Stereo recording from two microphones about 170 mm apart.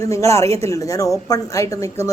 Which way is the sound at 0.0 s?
20° left (ahead or behind).